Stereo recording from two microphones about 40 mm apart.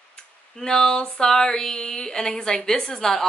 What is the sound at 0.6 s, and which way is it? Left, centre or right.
Speech, centre.